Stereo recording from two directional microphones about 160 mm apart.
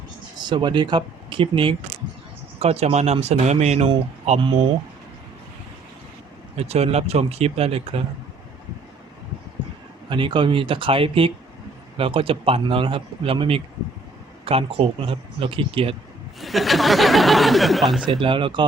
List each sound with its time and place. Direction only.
0.3 s speech: 30° right (ahead or behind); by 4.4 s 45° right (ahead or behind)
6.6 s speech: 40° right (ahead or behind)
10.1 s speech: 30° right (ahead or behind)
16.4 s speech: centre (ahead or behind)
18.0 s speech: 30° right (ahead or behind)